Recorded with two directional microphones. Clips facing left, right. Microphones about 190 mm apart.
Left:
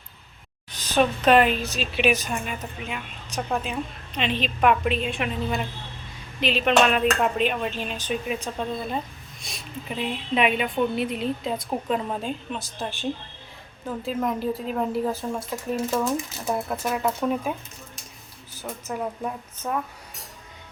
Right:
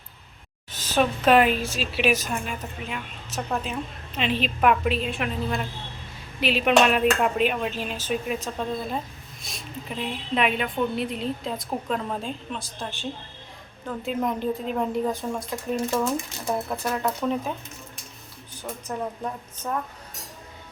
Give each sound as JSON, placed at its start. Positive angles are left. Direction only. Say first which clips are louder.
{"t": 0.8, "sound": "a woman's voice", "louder": "left 1 dB", "side_deg": -5}
{"t": 6.4, "sound": "a woman's voice", "louder": "right 1 dB", "side_deg": -10}
{"t": 12.8, "sound": "a woman's voice", "louder": "left 3 dB", "side_deg": 15}
{"t": 13.8, "sound": "a woman's voice", "louder": "even", "side_deg": 0}
{"t": 18.6, "sound": "a woman's voice", "louder": "left 1 dB", "side_deg": 5}